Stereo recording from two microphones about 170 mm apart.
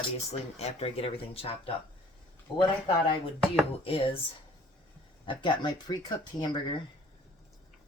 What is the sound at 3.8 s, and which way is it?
Speech, 30° left (ahead or behind).